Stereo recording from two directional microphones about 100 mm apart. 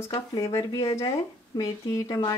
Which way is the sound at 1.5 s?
35° left (ahead or behind).